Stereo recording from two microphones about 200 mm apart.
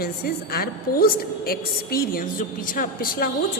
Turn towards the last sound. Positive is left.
turn(degrees=45)  # may be behind; listen again after turning